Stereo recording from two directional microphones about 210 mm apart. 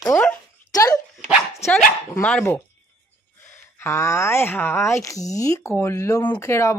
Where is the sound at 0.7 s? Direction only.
15° left (ahead or behind).